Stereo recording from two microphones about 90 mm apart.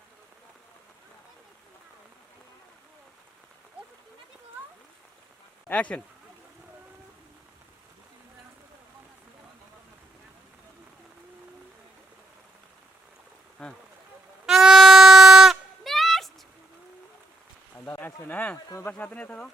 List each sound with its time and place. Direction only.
5.6 s speech: 15° left (ahead or behind)
13.6 s a sound: 5° left (ahead or behind)
14.4 s music: 5° right (ahead or behind)
17.7 s a sound: 20° left (ahead or behind)
18.5 s speech: 35° left (ahead or behind)
18.9 s speech: 15° left (ahead or behind)